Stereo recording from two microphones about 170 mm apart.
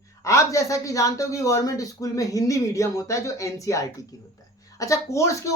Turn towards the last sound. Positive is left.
turn(degrees=20)  # may be behind; listen again after turning